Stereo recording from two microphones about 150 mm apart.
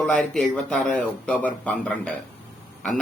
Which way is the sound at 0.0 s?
5° left (ahead or behind).